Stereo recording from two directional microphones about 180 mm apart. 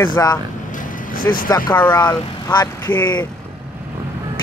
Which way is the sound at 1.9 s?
25° left (ahead or behind).